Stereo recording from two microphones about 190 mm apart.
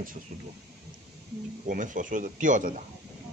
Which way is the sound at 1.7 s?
45° right (ahead or behind).